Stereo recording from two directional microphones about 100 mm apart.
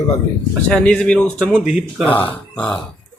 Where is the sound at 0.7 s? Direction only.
10° left (ahead or behind).